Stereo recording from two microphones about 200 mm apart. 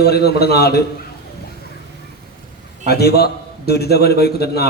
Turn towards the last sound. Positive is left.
turn(degrees=50)  # may be behind; listen again after turning